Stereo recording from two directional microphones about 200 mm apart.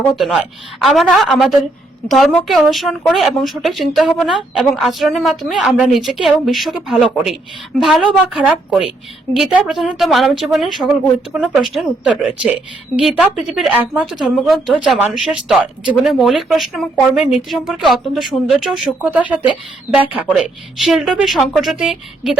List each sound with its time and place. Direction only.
0.2 s a woman's voice: centre (ahead or behind)